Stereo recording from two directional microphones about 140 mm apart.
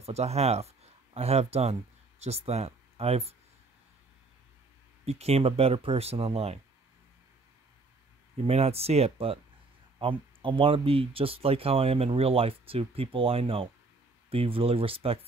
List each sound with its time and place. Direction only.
0.0 s speech: 50° right (ahead or behind)
5.0 s speech: 45° right (ahead or behind)
8.5 s speech: 45° right (ahead or behind)